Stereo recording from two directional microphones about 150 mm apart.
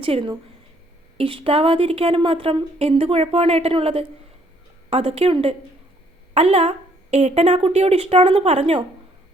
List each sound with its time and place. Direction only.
0.0 s a woman's voice: 40° right (ahead or behind)